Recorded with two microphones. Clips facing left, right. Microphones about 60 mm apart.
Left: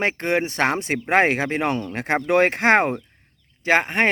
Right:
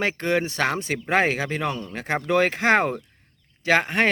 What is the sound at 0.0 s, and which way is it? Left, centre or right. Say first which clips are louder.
Speech: left 1 dB; left.